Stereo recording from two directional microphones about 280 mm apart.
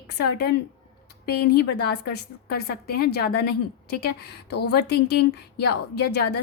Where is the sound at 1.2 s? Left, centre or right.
Left.